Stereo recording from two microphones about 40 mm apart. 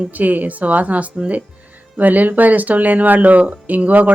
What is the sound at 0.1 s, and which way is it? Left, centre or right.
Speech, right.